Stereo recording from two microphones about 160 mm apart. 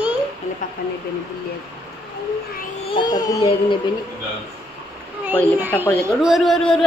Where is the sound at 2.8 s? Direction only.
30° left (ahead or behind).